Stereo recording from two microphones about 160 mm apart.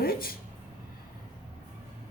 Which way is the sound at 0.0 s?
70° left (ahead or behind).